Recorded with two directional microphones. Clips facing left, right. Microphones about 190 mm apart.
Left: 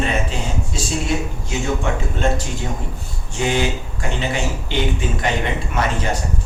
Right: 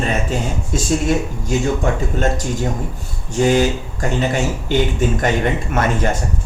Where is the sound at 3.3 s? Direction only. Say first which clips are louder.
Right 6 dB; 40° right (ahead or behind).